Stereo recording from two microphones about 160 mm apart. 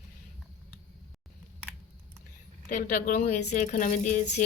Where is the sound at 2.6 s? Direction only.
55° left (ahead or behind).